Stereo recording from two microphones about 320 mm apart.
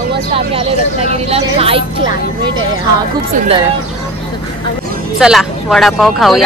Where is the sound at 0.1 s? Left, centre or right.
Centre.